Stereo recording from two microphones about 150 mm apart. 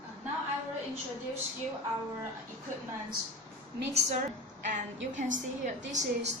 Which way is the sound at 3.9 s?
45° right (ahead or behind).